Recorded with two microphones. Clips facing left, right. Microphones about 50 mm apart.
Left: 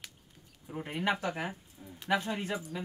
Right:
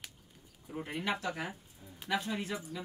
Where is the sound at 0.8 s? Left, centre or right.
Left.